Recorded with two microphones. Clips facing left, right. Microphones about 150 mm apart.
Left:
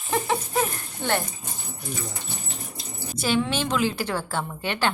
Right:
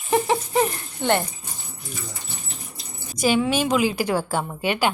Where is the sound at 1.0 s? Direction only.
15° right (ahead or behind).